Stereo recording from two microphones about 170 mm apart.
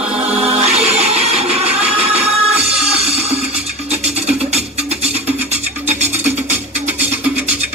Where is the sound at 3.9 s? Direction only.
40° right (ahead or behind).